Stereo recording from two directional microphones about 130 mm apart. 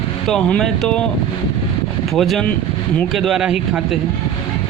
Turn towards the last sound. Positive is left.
turn(degrees=-5)  # may be behind; listen again after turning